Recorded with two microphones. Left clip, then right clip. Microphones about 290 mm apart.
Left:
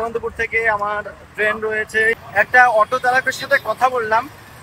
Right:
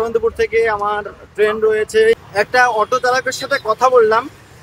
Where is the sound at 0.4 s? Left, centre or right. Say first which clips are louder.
Left 1 dB; centre.